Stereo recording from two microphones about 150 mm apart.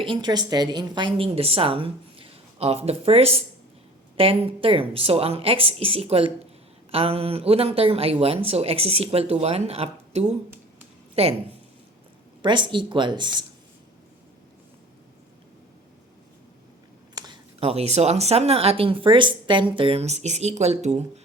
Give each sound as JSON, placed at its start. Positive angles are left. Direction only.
{"t": 0.0, "sound": "a woman's voice", "side_deg": -30}
{"t": 12.4, "sound": "a woman's voice", "side_deg": -30}
{"t": 17.2, "sound": "speech", "side_deg": -30}